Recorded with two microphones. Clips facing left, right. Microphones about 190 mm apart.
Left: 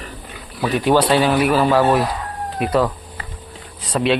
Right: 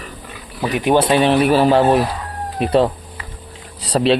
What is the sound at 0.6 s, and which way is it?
Speech, 15° right (ahead or behind).